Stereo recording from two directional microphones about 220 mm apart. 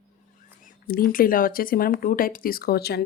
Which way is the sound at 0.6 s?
40° left (ahead or behind).